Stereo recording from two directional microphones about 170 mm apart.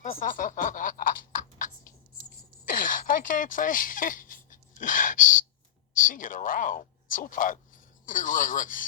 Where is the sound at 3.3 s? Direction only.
50° left (ahead or behind).